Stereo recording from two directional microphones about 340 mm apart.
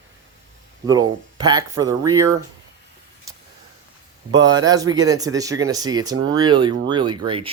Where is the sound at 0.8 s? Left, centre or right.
Centre.